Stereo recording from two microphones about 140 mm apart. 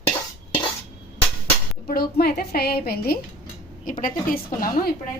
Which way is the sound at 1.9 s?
90° left.